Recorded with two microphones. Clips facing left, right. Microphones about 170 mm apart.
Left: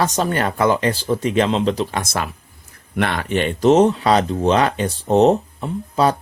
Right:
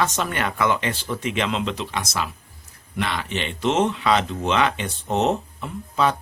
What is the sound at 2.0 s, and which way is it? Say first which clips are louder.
Speech: left 3 dB; 55° left (ahead or behind).